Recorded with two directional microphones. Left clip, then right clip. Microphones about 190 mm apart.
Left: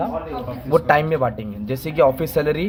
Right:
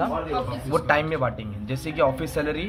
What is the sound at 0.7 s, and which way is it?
Speech, 45° left (ahead or behind).